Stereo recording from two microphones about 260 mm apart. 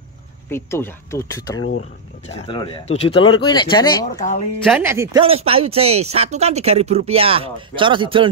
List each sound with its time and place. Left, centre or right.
0.5 s speech: centre
1.8 s speech: left
4.6 s speech: centre
5.2 s speech: right